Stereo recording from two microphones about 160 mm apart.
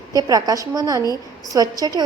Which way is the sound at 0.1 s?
25° right (ahead or behind).